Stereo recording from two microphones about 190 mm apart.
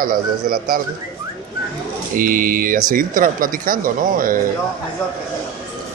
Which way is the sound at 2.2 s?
45° right (ahead or behind).